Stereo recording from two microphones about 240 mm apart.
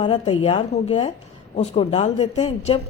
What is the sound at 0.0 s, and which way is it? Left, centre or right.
A woman's voice, left.